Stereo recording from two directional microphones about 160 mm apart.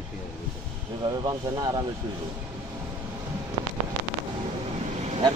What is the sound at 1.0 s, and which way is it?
Speech, 25° right (ahead or behind).